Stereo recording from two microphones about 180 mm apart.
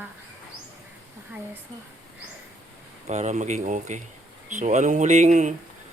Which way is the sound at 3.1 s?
40° right (ahead or behind).